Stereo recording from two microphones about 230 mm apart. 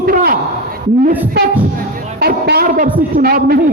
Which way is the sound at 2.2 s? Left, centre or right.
Right.